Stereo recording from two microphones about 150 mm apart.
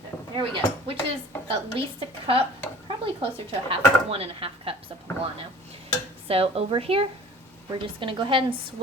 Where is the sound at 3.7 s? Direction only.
40° right (ahead or behind).